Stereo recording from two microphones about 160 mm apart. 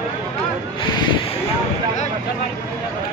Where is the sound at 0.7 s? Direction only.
30° left (ahead or behind).